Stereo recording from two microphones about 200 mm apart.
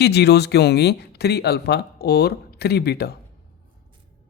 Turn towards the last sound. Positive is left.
turn(degrees=50)  # may be behind; listen again after turning